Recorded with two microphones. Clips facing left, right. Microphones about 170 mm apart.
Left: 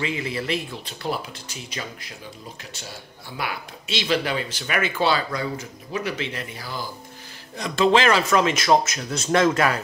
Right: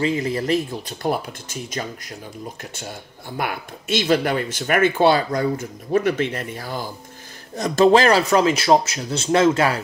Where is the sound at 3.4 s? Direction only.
50° right (ahead or behind).